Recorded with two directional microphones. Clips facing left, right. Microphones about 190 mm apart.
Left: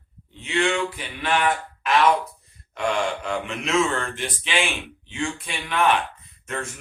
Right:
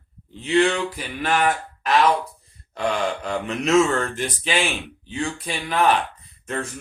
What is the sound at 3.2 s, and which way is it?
Speech, 40° right (ahead or behind).